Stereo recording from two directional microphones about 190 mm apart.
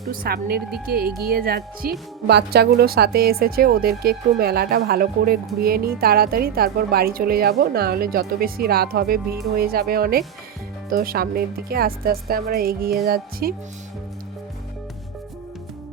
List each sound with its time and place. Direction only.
0.1 s speech: 50° right (ahead or behind)